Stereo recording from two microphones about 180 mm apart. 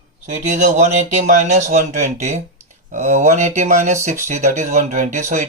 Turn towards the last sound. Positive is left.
turn(degrees=-40)  # may be behind; listen again after turning